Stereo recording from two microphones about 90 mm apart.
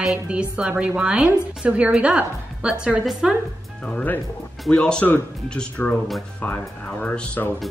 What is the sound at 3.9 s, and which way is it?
Speech, 20° left (ahead or behind).